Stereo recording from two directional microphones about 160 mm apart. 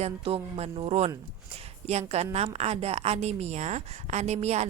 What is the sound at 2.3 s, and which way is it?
A woman's voice, 40° right (ahead or behind).